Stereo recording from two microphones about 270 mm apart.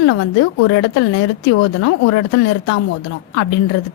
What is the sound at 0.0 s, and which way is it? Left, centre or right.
A woman's voice, left.